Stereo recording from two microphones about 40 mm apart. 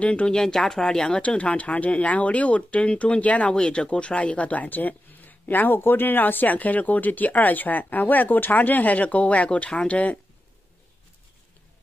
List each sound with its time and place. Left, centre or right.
0.0 s speech: left
0.3 s speech: centre; by 3.5 s left
3.5 s speech: left